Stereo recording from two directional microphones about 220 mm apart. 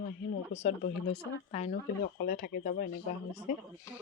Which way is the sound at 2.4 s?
40° left (ahead or behind).